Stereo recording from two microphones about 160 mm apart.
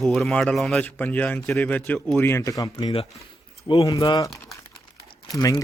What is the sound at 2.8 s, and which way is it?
Speech, 30° left (ahead or behind).